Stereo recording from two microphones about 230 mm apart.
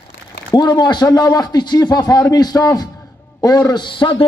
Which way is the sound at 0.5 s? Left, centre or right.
Centre.